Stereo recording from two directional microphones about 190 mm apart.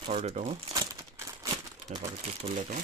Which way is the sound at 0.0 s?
35° right (ahead or behind).